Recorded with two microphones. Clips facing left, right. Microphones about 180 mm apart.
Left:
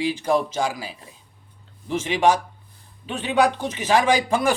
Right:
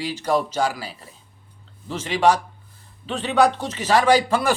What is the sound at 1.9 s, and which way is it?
Speech, 15° left (ahead or behind).